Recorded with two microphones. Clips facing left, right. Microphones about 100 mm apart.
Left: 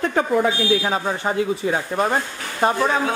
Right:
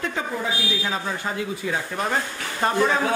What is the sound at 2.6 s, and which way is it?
Speech, 15° left (ahead or behind).